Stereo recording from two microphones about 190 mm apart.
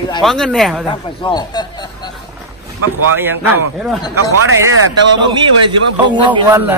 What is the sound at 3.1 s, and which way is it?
Speech, 10° right (ahead or behind).